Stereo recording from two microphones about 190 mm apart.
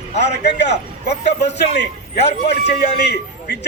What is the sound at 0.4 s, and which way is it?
A man's voice, 65° left (ahead or behind).